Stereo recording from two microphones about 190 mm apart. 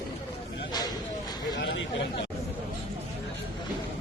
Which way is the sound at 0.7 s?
20° left (ahead or behind).